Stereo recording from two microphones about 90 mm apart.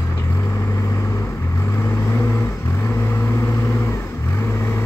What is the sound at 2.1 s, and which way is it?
Vehicle, 25° left (ahead or behind).